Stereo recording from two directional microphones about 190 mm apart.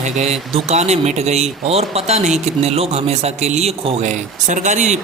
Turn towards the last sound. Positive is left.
turn(degrees=-40)  # may be behind; listen again after turning